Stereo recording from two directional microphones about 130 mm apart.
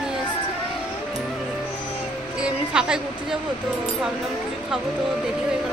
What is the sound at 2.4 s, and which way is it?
Music, 5° right (ahead or behind).